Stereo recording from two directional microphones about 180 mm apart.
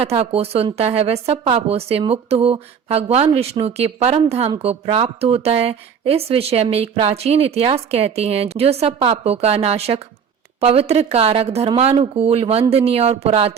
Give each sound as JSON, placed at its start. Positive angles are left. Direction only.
{"t": 0.0, "sound": "speech", "side_deg": -35}